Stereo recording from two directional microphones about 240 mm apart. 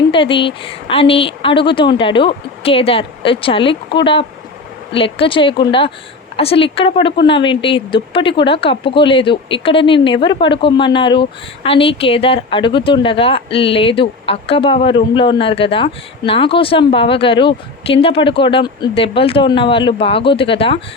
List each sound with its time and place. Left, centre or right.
0.1 s speech: left